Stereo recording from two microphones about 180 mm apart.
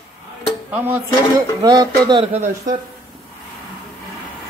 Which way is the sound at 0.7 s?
10° right (ahead or behind).